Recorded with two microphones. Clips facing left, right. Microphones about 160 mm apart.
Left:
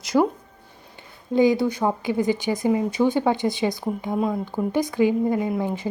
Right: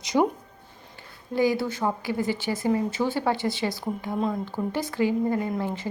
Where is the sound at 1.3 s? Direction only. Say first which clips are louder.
Left 5 dB; 20° left (ahead or behind).